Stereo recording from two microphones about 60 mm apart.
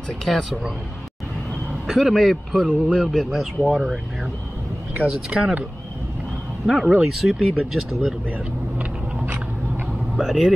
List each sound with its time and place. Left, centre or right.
0.2 s speech: centre
1.9 s speech: centre
5.3 s speech: centre
6.6 s speech: centre
10.1 s speech: centre